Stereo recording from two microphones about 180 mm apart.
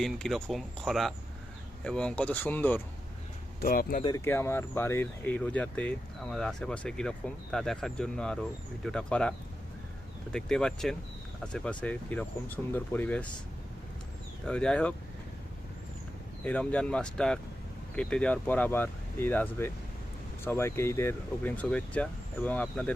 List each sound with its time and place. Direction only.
0.0 s speech: 5° left (ahead or behind)
3.6 s speech: 55° left (ahead or behind)
4.0 s speech: 15° left (ahead or behind)
10.3 s speech: 5° left (ahead or behind)
14.4 s speech: 5° left (ahead or behind)
16.4 s speech: 5° left (ahead or behind)